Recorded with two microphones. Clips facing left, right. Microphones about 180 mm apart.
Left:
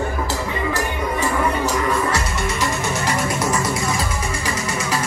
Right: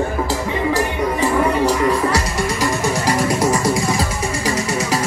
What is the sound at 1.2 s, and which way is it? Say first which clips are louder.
Music: right 5 dB; 35° right (ahead or behind).